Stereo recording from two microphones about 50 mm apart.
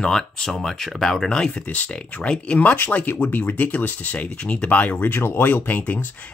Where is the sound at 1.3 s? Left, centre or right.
Centre; by 5.5 s left.